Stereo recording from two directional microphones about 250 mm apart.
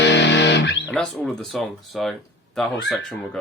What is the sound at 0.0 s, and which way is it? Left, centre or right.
Music, left.